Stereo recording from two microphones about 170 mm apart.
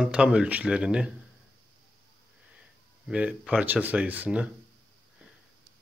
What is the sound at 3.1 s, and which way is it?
Speech, 5° right (ahead or behind).